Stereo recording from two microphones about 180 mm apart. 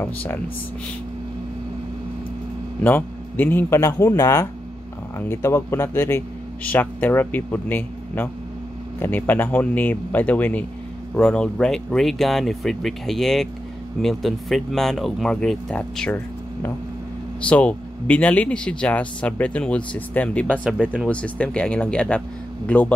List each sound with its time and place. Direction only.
0.0 s speech: 10° left (ahead or behind)
2.8 s speech: 10° left (ahead or behind)
17.5 s speech: 5° left (ahead or behind)